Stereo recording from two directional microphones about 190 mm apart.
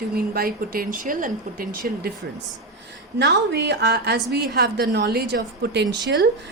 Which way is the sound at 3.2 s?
65° right (ahead or behind).